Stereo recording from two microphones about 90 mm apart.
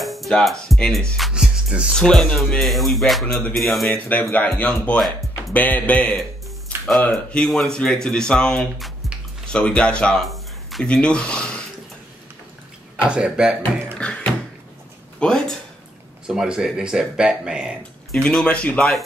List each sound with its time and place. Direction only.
0.0 s music: centre (ahead or behind)
1.3 s music: 10° right (ahead or behind)
2.0 s speech: 10° left (ahead or behind)
2.6 s speech: centre (ahead or behind)
4.1 s speech: 15° left (ahead or behind)
10.2 s a sound: centre (ahead or behind)
10.9 s speech: 10° left (ahead or behind)
12.9 s speech: 10° right (ahead or behind)
13.9 s a sound: 10° left (ahead or behind)
15.1 s speech: 10° left (ahead or behind)
16.3 s speech: 5° right (ahead or behind)
18.1 s speech: 5° left (ahead or behind)